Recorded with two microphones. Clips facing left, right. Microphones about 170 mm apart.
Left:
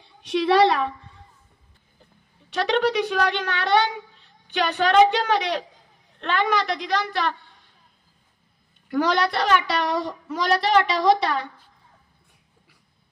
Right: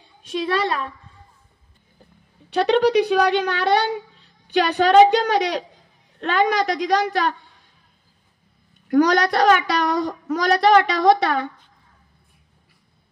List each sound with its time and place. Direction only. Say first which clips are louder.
0.2 s a woman's voice: left 5 dB; 70° left (ahead or behind)
2.7 s a woman's voice: right 5 dB; 35° right (ahead or behind)
8.9 s speech: right 5 dB; 45° right (ahead or behind)